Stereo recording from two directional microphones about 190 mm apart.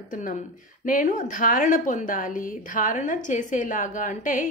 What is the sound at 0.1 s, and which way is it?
A woman's voice, 45° left (ahead or behind).